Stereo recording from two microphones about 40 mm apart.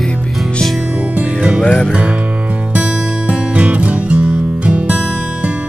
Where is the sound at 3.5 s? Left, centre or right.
Right.